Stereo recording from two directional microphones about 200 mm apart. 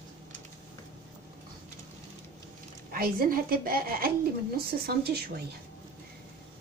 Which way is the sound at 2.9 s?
45° right (ahead or behind).